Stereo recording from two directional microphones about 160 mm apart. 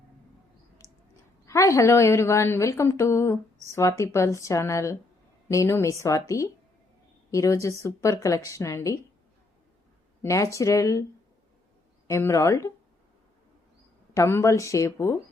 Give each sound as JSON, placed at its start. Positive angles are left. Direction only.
{"t": 1.5, "sound": "a woman's voice", "side_deg": 20}
{"t": 10.2, "sound": "a woman's voice", "side_deg": 20}
{"t": 12.0, "sound": "a woman's voice", "side_deg": 20}
{"t": 14.1, "sound": "a woman's voice", "side_deg": 15}